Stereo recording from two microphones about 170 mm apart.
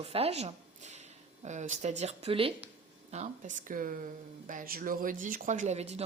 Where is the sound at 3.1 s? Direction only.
45° right (ahead or behind).